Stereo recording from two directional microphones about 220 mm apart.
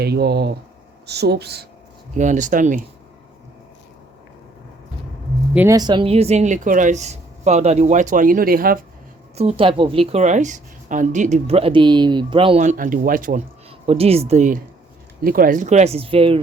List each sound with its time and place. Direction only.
0.0 s speech: 45° right (ahead or behind)
2.1 s speech: 35° right (ahead or behind)
5.5 s speech: 15° right (ahead or behind); by 8.8 s 40° right (ahead or behind)
9.3 s a woman's voice: 30° right (ahead or behind)
13.7 s speech: 25° right (ahead or behind)